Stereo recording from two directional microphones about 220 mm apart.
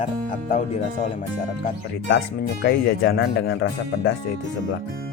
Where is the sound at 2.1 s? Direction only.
50° left (ahead or behind).